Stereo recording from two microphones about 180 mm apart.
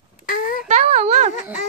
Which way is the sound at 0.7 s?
35° right (ahead or behind).